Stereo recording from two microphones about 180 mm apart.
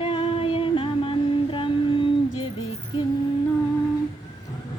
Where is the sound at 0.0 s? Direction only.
30° left (ahead or behind).